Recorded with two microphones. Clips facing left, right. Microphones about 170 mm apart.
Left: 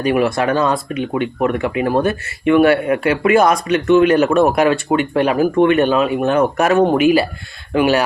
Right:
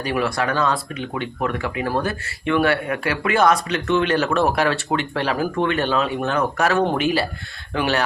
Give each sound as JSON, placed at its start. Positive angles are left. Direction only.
{"t": 0.0, "sound": "speech", "side_deg": 20}